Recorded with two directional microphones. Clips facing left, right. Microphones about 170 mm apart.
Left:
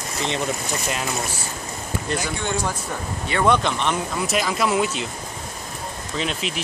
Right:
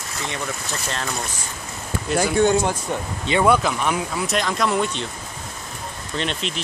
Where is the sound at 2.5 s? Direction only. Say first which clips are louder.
Right 6 dB; 25° right (ahead or behind).